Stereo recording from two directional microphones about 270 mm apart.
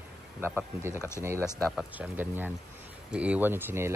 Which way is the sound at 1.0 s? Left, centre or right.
Centre.